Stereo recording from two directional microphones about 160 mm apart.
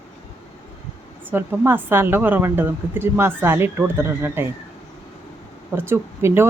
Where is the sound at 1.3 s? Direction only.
15° right (ahead or behind).